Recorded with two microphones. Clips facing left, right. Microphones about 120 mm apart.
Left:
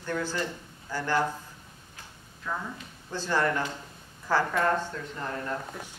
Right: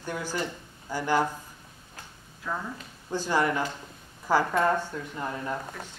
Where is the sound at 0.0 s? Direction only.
15° right (ahead or behind).